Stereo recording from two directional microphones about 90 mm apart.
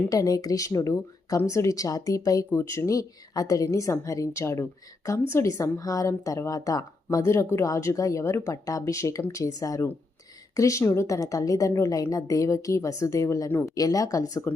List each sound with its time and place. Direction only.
0.1 s speech: 40° left (ahead or behind)
13.7 s speech: 40° left (ahead or behind)